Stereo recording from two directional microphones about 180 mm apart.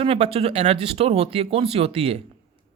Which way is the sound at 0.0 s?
30° right (ahead or behind).